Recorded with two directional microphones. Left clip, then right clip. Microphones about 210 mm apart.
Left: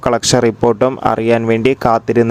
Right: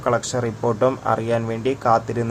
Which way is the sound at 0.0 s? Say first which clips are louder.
Left 9 dB; 45° left (ahead or behind).